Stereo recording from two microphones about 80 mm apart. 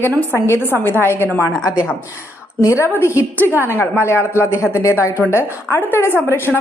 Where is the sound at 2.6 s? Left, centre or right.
Left.